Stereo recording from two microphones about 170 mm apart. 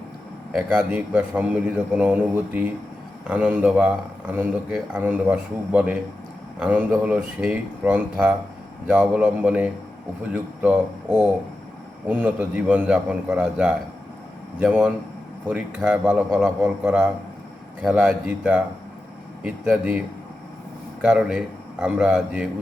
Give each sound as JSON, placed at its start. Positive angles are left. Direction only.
{"t": 0.5, "sound": "a man's voice", "side_deg": -10}
{"t": 12.0, "sound": "a man's voice", "side_deg": -10}
{"t": 21.0, "sound": "a man's voice", "side_deg": -5}